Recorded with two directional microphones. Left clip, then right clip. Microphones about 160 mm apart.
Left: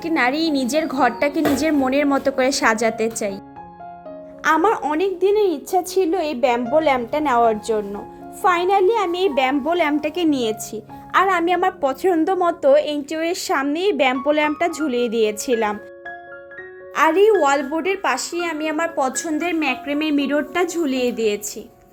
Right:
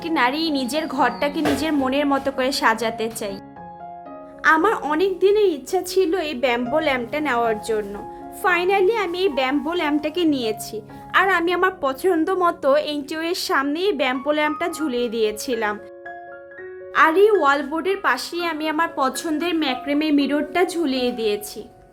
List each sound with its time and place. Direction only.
0.0 s a woman's voice: 15° left (ahead or behind)
4.4 s a woman's voice: 10° left (ahead or behind)
16.9 s a woman's voice: 10° left (ahead or behind)